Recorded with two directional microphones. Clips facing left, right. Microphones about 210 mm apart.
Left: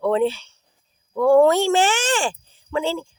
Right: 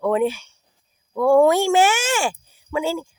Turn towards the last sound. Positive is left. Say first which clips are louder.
# even
turn(degrees=-10)  # may be behind; listen again after turning